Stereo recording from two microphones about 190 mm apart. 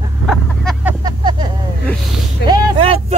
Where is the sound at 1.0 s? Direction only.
25° right (ahead or behind).